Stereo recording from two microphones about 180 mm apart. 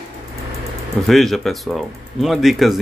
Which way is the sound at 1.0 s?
Centre (ahead or behind).